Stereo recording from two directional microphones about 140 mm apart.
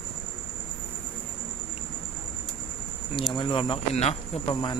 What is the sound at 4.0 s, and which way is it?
Speech, 50° left (ahead or behind).